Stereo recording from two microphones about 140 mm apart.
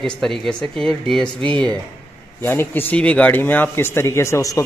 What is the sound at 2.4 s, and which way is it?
A man's voice, 15° left (ahead or behind).